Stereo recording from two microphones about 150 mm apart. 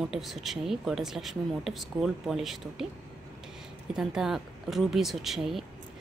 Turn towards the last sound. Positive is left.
turn(degrees=0)  # may be behind; listen again after turning